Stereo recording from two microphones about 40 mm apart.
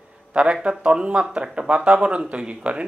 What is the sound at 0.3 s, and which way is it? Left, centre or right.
Speech, right.